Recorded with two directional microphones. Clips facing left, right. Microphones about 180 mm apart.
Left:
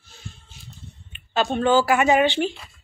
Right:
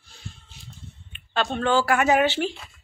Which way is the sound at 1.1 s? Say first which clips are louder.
Left 3 dB; 5° left (ahead or behind).